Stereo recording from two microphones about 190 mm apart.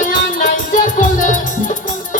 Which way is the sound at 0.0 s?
40° left (ahead or behind).